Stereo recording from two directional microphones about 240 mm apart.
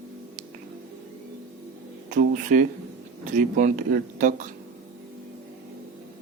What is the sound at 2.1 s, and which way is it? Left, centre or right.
Speech, right.